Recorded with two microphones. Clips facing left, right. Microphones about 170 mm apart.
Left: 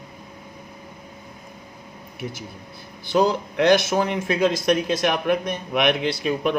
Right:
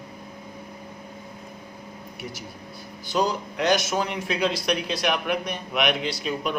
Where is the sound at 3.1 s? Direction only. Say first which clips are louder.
Left 5 dB; 55° left (ahead or behind).